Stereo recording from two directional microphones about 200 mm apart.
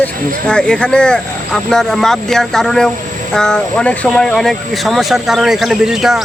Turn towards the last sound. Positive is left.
turn(degrees=0)  # may be behind; listen again after turning